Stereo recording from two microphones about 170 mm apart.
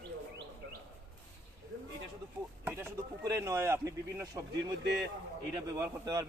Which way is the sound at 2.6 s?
10° right (ahead or behind).